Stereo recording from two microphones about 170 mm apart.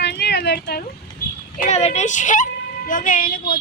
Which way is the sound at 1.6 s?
40° left (ahead or behind).